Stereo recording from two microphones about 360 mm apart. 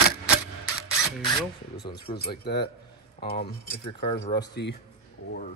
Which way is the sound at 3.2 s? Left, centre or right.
Left.